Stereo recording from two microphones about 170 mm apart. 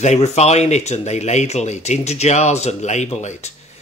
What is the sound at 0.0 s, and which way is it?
Speech, 40° left (ahead or behind).